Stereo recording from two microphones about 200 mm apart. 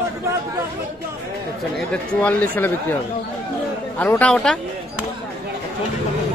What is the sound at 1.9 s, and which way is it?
Speech, 10° left (ahead or behind).